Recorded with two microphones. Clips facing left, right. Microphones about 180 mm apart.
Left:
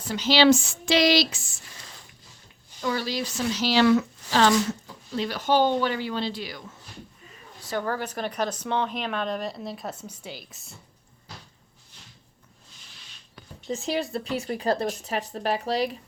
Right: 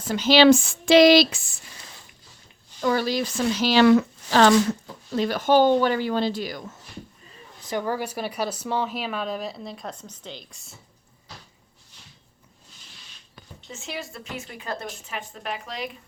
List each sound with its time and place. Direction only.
0.0 s speech: 50° right (ahead or behind)
2.8 s speech: 50° right (ahead or behind)
7.6 s speech: 15° right (ahead or behind); by 10.8 s centre (ahead or behind)
13.7 s speech: 35° left (ahead or behind)